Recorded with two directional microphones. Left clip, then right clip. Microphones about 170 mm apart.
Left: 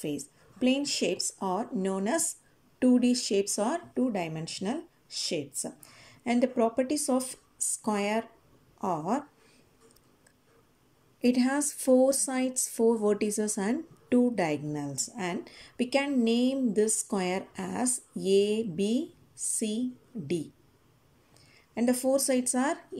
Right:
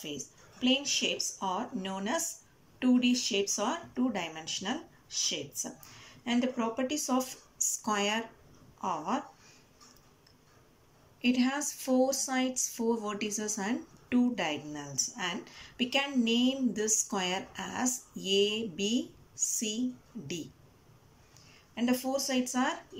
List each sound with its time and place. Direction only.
0.0 s speech: 35° left (ahead or behind)
11.1 s speech: 35° left (ahead or behind)
21.7 s speech: 35° left (ahead or behind)